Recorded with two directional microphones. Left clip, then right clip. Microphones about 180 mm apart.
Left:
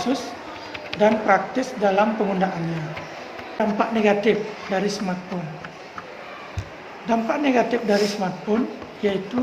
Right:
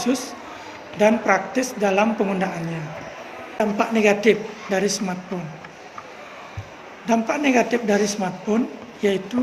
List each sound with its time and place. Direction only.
0.0 s a woman's voice: 40° right (ahead or behind)
3.6 s a woman's voice: 40° right (ahead or behind)
7.1 s a woman's voice: 40° right (ahead or behind)